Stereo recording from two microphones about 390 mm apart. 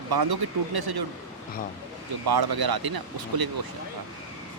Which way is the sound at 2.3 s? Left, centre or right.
Right.